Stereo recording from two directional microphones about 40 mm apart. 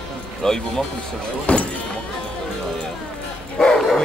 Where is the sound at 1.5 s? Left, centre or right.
Left.